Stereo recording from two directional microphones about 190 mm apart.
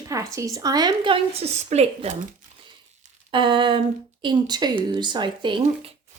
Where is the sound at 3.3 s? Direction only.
25° right (ahead or behind).